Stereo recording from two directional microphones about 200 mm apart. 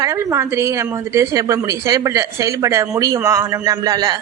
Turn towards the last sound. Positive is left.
turn(degrees=-20)  # may be behind; listen again after turning